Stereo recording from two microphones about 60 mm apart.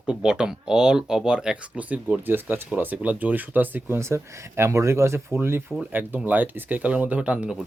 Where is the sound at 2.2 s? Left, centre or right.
Right.